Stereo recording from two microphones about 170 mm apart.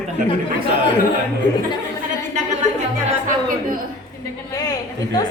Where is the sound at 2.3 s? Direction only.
45° right (ahead or behind).